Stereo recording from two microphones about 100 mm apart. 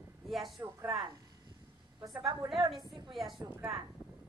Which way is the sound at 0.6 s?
30° right (ahead or behind).